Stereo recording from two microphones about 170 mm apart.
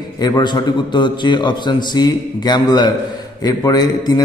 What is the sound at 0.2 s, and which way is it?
Speech, 25° left (ahead or behind).